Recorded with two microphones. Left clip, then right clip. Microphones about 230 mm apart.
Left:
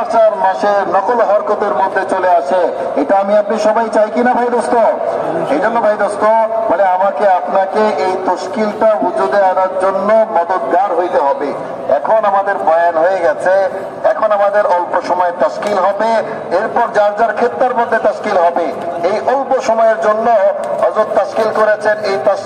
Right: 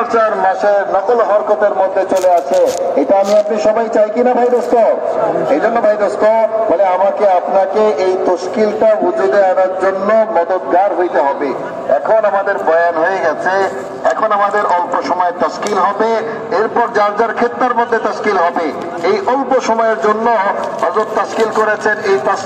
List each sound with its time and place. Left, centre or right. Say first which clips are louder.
0.1 s a man's voice: left 4 dB; left
0.7 s a man's voice: right 1 dB; centre
1.6 s a man's voice: right 1 dB; left